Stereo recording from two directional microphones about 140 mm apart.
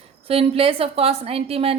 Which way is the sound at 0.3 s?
45° right (ahead or behind).